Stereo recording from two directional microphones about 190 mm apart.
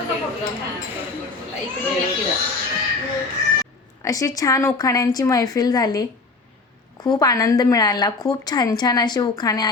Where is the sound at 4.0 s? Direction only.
15° left (ahead or behind).